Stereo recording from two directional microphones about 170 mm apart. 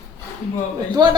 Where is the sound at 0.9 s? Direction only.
25° right (ahead or behind).